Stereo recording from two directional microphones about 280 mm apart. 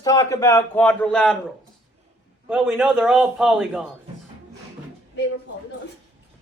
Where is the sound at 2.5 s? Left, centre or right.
Centre.